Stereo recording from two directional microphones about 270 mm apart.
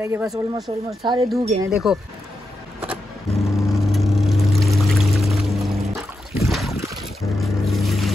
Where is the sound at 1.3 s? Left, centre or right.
Centre.